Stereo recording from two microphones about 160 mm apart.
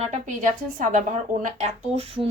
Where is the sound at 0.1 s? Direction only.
50° right (ahead or behind).